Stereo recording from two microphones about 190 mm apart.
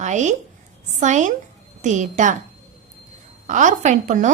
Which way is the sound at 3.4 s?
40° right (ahead or behind).